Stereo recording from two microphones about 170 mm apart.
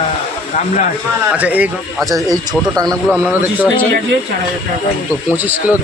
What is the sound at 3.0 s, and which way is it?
Speech, 5° left (ahead or behind).